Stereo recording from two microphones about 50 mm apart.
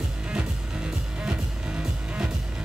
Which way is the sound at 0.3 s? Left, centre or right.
Centre.